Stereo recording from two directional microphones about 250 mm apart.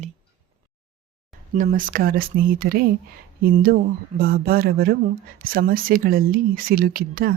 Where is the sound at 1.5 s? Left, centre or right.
Right.